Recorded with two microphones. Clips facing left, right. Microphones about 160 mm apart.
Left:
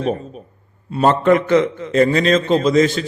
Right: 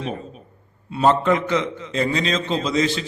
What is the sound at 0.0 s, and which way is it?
A man's voice, 45° left (ahead or behind).